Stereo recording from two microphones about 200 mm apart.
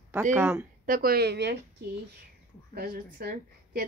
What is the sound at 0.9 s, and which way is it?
Speech, 50° right (ahead or behind).